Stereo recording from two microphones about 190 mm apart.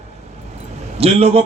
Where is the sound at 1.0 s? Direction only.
30° right (ahead or behind).